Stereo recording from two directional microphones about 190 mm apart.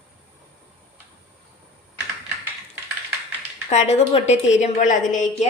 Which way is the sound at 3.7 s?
35° left (ahead or behind).